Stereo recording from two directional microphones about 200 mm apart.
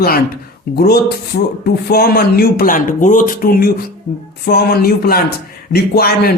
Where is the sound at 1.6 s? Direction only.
50° left (ahead or behind).